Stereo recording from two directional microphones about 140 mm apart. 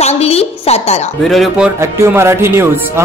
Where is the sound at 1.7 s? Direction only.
20° right (ahead or behind).